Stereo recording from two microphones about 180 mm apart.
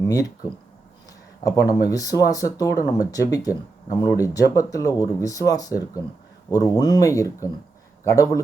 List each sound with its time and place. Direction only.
1.5 s speech: 20° left (ahead or behind)